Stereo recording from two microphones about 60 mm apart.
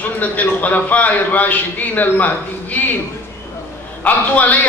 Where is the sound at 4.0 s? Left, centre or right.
Left.